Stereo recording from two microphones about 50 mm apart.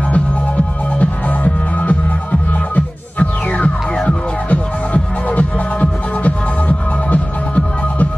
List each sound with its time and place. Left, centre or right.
0.9 s music: left